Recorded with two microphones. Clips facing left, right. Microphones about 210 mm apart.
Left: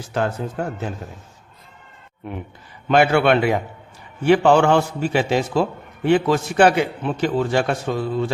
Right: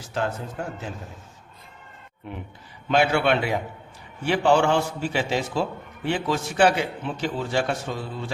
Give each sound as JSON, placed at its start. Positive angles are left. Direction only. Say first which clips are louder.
{"t": 2.9, "sound": "a man's voice", "louder": "left 5 dB", "side_deg": 60}